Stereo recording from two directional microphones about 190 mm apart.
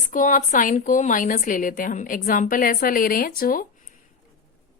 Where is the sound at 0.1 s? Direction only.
45° left (ahead or behind).